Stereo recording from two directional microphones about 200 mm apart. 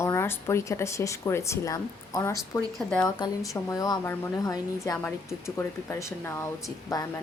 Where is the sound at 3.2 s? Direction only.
15° left (ahead or behind).